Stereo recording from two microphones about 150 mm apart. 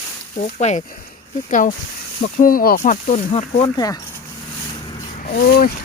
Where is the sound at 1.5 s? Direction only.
60° left (ahead or behind).